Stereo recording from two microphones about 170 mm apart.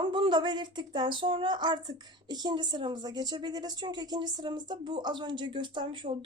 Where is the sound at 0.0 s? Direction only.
30° right (ahead or behind).